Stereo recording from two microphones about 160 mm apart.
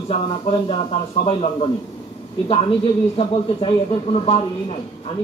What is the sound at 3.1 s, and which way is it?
Speech, 40° left (ahead or behind).